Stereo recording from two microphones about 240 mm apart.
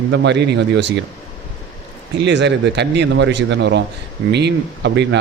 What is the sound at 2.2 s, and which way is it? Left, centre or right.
A man's voice, right.